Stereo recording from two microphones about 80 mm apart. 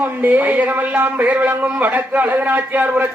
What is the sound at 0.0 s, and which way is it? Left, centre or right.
A man's voice, right.